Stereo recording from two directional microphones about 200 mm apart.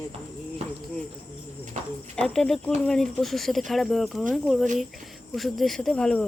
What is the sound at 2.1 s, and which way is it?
Speech, 5° left (ahead or behind).